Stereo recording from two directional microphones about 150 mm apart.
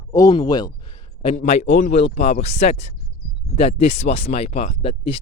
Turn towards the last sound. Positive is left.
turn(degrees=40)  # may be behind; listen again after turning